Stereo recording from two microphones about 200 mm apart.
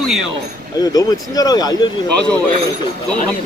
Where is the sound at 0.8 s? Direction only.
20° left (ahead or behind).